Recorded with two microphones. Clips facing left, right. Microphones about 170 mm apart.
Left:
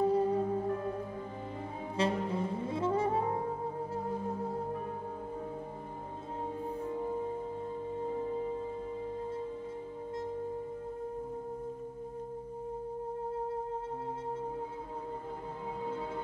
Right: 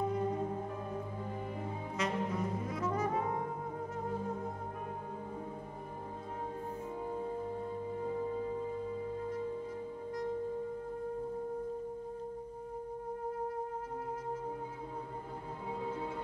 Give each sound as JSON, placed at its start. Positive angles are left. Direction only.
{"t": 0.0, "sound": "music", "side_deg": 30}
{"t": 2.0, "sound": "saxophone", "side_deg": 30}